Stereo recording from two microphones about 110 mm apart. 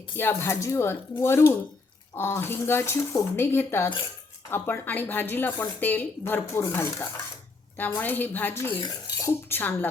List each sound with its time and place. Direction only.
0.2 s a woman's voice: 20° left (ahead or behind)